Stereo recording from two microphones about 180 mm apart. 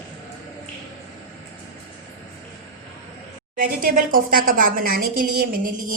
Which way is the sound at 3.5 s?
50° right (ahead or behind).